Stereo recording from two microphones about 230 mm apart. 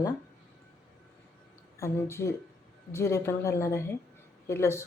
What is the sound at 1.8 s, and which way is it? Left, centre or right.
Speech, centre.